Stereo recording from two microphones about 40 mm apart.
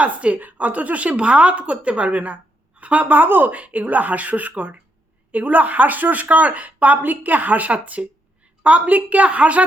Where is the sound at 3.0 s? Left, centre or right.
Right.